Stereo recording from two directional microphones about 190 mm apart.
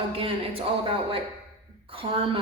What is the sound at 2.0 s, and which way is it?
Speech, 30° right (ahead or behind).